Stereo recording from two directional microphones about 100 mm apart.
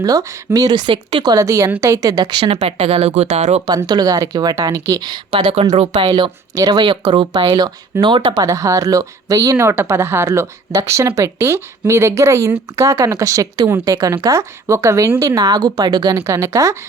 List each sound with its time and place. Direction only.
0.0 s a woman's voice: 35° right (ahead or behind); by 2.6 s 55° right (ahead or behind)
2.6 s speech: 90° right
3.8 s a woman's voice: 40° right (ahead or behind)
5.3 s speech: 65° right (ahead or behind)
6.1 s a woman's voice: 50° right (ahead or behind)
6.8 s speech: 55° right (ahead or behind)
8.4 s a woman's voice: 35° right (ahead or behind)
15.4 s a woman's voice: 40° right (ahead or behind)
16.1 s speech: 30° right (ahead or behind)